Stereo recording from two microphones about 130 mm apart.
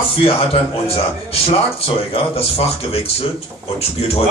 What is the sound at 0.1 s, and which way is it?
Speech, 45° left (ahead or behind).